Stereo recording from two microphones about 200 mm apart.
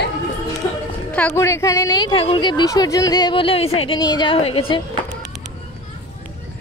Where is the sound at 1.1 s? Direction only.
10° left (ahead or behind); by 4.8 s 30° left (ahead or behind).